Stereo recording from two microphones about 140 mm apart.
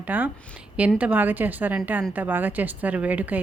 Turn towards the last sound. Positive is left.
turn(degrees=-10)  # may be behind; listen again after turning